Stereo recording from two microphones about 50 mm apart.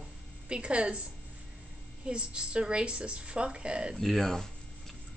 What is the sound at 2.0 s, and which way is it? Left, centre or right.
A woman's voice, centre.